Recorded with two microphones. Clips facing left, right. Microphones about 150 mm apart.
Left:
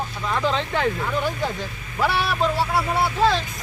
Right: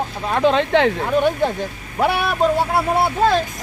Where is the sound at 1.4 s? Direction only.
55° right (ahead or behind).